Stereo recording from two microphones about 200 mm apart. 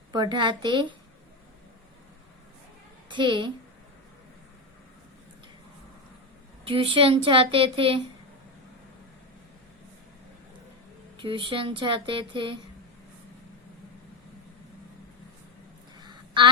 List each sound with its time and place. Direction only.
0.1 s a woman's voice: 20° right (ahead or behind)
3.1 s a woman's voice: 25° right (ahead or behind)
6.7 s a woman's voice: 25° right (ahead or behind)
11.2 s a woman's voice: 25° right (ahead or behind)
16.0 s a sound: 20° right (ahead or behind)